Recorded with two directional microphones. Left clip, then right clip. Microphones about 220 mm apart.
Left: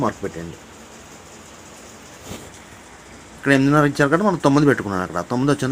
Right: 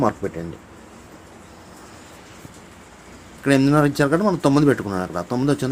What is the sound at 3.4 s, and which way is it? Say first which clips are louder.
Speech: left 1 dB; centre (ahead or behind).